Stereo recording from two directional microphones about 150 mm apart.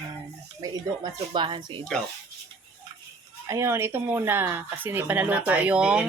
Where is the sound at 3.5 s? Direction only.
20° right (ahead or behind).